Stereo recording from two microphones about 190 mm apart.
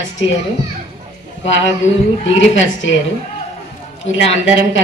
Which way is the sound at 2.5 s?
80° left.